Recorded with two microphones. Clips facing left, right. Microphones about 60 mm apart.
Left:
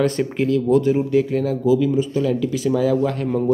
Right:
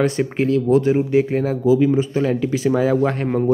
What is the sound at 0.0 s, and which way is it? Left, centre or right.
Speech, centre.